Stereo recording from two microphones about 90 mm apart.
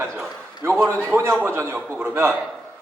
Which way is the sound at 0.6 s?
30° right (ahead or behind).